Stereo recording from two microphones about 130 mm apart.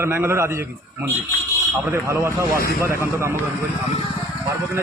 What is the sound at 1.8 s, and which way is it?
A man's voice, 20° right (ahead or behind).